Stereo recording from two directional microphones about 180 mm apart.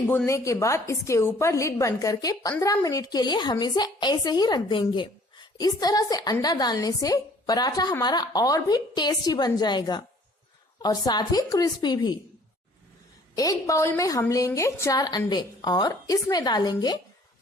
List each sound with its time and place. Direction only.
0.1 s a woman's voice: 15° left (ahead or behind)
13.3 s a woman's voice: 20° left (ahead or behind)